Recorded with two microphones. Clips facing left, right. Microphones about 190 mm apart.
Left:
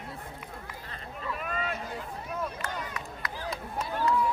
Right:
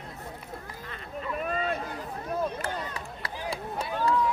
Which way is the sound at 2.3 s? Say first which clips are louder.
Right 5 dB; 30° right (ahead or behind).